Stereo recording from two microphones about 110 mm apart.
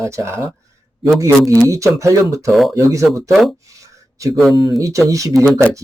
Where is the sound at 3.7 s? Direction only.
30° right (ahead or behind).